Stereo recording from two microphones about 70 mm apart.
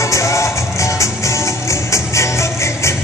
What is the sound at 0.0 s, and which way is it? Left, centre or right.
Music, left.